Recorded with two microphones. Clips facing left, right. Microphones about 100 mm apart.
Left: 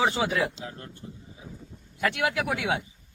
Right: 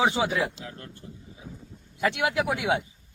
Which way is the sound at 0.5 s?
25° left (ahead or behind).